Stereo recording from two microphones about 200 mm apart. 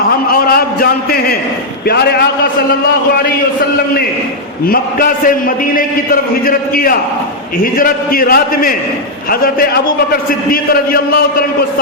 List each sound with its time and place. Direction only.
0.5 s a man's voice: 50° left (ahead or behind)
4.6 s a man's voice: 45° left (ahead or behind)